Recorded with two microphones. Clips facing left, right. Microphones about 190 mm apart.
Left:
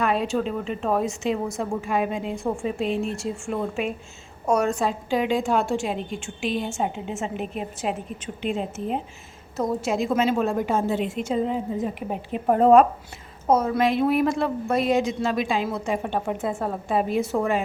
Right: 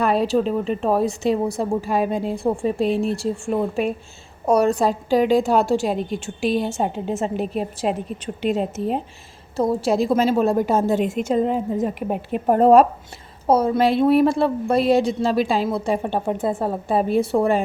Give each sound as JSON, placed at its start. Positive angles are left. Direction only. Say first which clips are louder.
{"t": 0.0, "sound": "a woman's voice", "louder": "right 5 dB", "side_deg": -35}
{"t": 12.5, "sound": "a woman's voice", "louder": "right 2 dB", "side_deg": -40}